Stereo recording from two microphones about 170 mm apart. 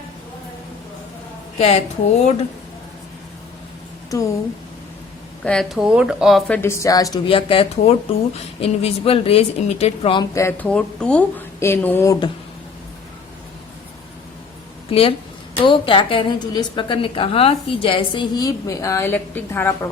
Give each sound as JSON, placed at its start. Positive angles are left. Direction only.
{"t": 1.5, "sound": "speech", "side_deg": 40}
{"t": 5.4, "sound": "speech", "side_deg": 5}
{"t": 6.5, "sound": "a woman's voice", "side_deg": 15}
{"t": 10.3, "sound": "speech", "side_deg": 15}
{"t": 14.8, "sound": "a woman's voice", "side_deg": 35}